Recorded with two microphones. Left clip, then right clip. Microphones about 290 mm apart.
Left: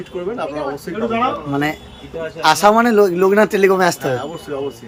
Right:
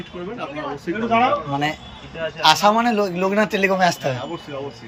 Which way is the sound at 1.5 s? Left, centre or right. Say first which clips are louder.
Left 3 dB; centre.